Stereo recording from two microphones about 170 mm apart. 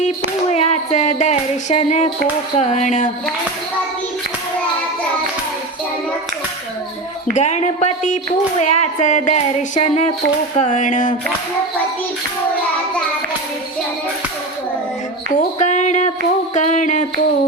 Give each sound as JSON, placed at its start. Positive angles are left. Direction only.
{"t": 0.5, "sound": "speech", "side_deg": 40}
{"t": 7.3, "sound": "speech", "side_deg": 45}
{"t": 15.4, "sound": "a sound", "side_deg": 45}
{"t": 16.6, "sound": "speech", "side_deg": 45}